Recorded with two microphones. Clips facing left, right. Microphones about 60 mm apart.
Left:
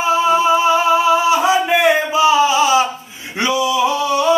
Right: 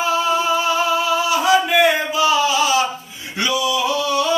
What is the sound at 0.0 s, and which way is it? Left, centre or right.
Singing, left.